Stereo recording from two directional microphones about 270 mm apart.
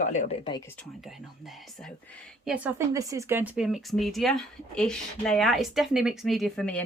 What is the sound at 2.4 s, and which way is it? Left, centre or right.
Speech, centre.